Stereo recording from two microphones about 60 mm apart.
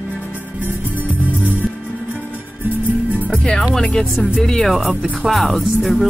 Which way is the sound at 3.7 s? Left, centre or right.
Centre.